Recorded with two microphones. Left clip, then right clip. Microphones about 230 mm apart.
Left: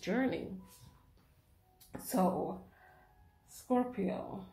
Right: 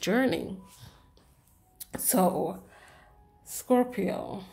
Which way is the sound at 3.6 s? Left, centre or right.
Right.